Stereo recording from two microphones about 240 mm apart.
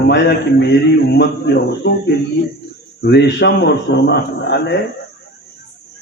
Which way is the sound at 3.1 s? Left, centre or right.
Left.